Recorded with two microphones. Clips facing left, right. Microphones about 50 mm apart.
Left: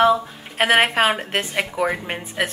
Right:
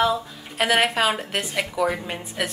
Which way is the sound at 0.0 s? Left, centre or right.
Left.